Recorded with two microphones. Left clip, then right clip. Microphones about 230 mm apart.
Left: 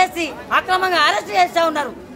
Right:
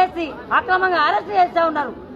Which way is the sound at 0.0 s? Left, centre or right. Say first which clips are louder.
Left 1 dB; left.